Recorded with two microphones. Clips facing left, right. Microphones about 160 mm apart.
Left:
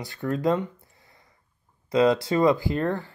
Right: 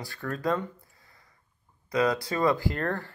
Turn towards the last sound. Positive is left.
turn(degrees=15)  # may be behind; listen again after turning